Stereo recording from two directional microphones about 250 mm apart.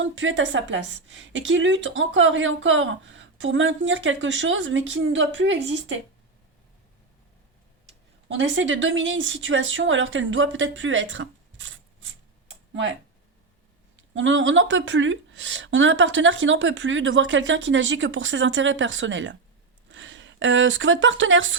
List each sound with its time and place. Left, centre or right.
0.0 s a woman's voice: right
8.3 s a woman's voice: right
12.5 s computer keyboard: right
14.1 s a woman's voice: right